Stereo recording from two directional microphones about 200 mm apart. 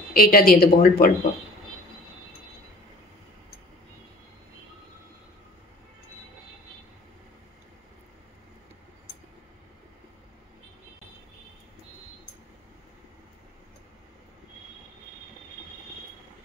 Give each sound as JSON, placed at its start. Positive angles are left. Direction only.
{"t": 0.1, "sound": "speech", "side_deg": 45}